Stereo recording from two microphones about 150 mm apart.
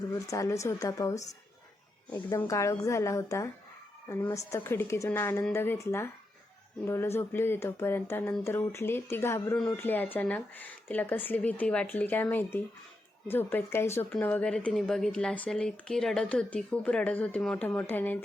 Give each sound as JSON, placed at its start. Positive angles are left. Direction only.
{"t": 0.1, "sound": "a woman's voice", "side_deg": 20}
{"t": 2.3, "sound": "a woman's voice", "side_deg": 20}